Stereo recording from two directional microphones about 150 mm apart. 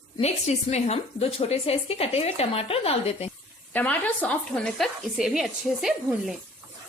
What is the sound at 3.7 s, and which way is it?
Speech, 10° left (ahead or behind).